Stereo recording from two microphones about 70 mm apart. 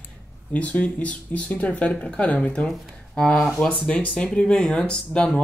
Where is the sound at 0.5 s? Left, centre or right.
Centre.